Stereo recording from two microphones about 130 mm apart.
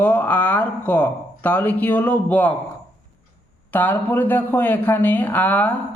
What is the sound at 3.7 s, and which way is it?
Speech, 15° left (ahead or behind).